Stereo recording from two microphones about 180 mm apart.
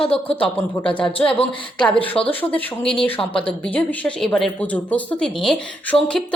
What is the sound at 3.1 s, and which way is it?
Speech, 30° left (ahead or behind).